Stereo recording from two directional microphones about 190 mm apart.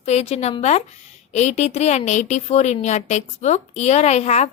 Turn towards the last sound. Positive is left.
turn(degrees=35)  # may be behind; listen again after turning